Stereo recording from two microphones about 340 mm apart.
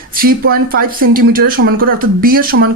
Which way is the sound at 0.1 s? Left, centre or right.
Right.